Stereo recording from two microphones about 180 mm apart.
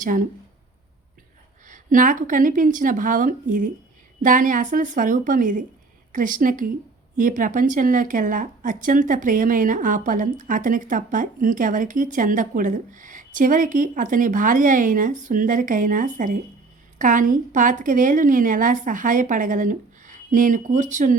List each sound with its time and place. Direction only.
0.0 s speech: 50° right (ahead or behind)
1.6 s speech: 45° right (ahead or behind)